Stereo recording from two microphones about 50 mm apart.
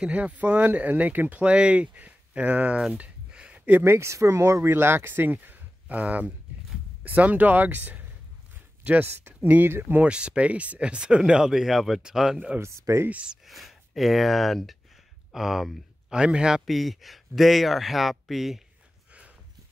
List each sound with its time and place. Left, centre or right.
0.0 s speech: right
1.4 s speech: right
2.9 s a sound: right
3.8 s speech: right
4.6 s speech: right
9.0 s speech: right
10.0 s a man's voice: right
12.5 s speech: right
13.5 s speech: centre
16.1 s a man's voice: centre
16.6 s speech: centre